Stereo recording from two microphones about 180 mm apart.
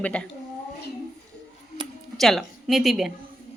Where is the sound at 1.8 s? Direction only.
25° right (ahead or behind).